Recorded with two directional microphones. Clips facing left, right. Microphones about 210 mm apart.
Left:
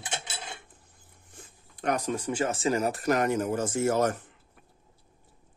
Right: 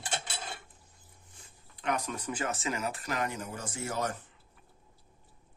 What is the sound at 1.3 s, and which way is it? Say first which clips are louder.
Zipper: left 10 dB; 50° left (ahead or behind).